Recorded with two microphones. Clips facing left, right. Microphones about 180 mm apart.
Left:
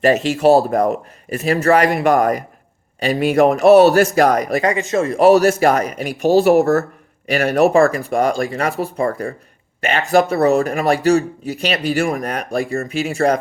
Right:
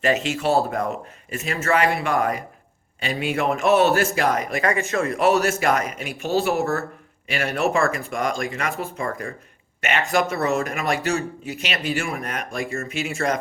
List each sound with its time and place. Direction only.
0.0 s a man's voice: 40° left (ahead or behind)
4.6 s speech: 20° left (ahead or behind)
5.1 s speech: 35° left (ahead or behind)